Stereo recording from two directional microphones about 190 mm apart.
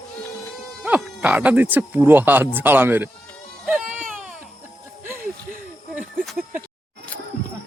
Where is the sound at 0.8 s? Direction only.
5° right (ahead or behind).